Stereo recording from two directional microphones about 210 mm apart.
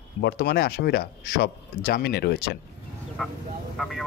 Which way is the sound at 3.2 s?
Centre (ahead or behind).